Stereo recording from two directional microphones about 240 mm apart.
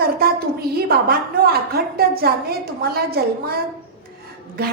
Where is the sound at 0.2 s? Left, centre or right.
Right.